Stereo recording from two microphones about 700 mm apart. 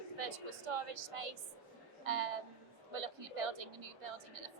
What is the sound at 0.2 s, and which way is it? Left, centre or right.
A woman's voice, right.